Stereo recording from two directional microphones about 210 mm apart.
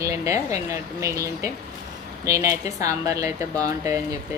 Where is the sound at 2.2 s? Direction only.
15° right (ahead or behind).